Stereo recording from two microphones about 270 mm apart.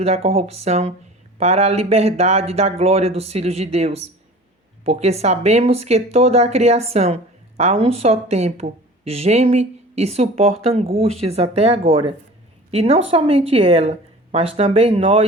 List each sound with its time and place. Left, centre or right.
0.0 s speech: right